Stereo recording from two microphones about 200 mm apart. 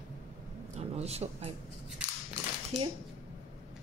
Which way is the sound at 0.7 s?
30° right (ahead or behind).